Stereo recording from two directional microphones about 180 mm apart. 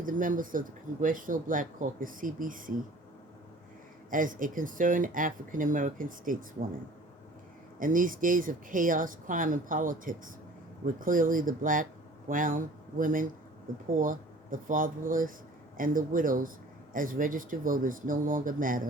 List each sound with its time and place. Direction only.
0.0 s speech: 45° right (ahead or behind)
4.1 s speech: 50° right (ahead or behind)
7.8 s speech: 50° right (ahead or behind)